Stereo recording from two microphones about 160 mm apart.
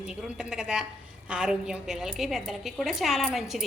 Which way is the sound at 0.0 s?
5° right (ahead or behind).